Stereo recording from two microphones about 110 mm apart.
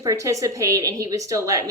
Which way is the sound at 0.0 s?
30° right (ahead or behind).